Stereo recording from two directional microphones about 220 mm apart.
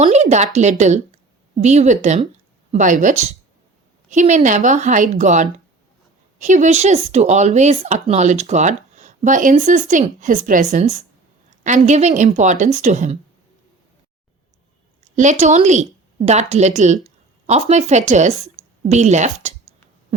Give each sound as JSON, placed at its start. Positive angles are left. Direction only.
{"t": 0.0, "sound": "speech", "side_deg": -30}
{"t": 15.1, "sound": "a woman's voice", "side_deg": -35}